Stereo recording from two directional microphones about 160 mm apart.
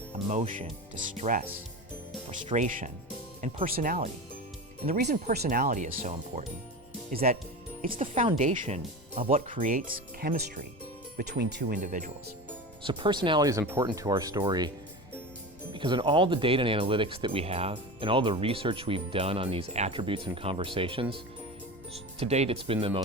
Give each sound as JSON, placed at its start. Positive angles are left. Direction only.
{"t": 0.1, "sound": "speech", "side_deg": -45}
{"t": 2.5, "sound": "speech", "side_deg": -50}
{"t": 5.3, "sound": "speech", "side_deg": -80}
{"t": 7.1, "sound": "speech", "side_deg": -65}
{"t": 7.9, "sound": "speech", "side_deg": -45}
{"t": 11.2, "sound": "speech", "side_deg": -90}
{"t": 12.8, "sound": "speech", "side_deg": -30}
{"t": 15.7, "sound": "speech", "side_deg": -30}